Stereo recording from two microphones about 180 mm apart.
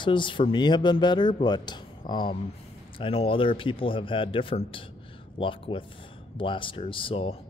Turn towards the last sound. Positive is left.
turn(degrees=30)  # may be behind; listen again after turning